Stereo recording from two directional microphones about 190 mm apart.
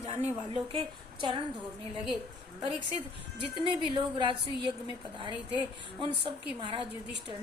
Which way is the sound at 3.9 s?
25° right (ahead or behind).